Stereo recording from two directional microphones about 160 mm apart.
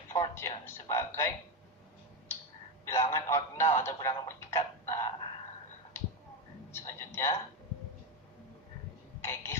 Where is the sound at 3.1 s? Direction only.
20° left (ahead or behind).